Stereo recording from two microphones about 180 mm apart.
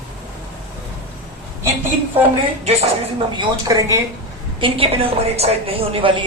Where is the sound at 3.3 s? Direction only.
20° right (ahead or behind).